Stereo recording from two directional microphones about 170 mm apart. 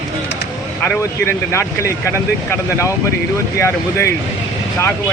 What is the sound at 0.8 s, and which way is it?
Speech, 10° left (ahead or behind).